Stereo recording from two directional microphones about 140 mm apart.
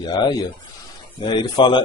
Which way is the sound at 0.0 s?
30° left (ahead or behind).